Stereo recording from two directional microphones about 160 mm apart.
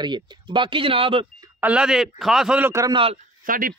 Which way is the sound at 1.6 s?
5° right (ahead or behind).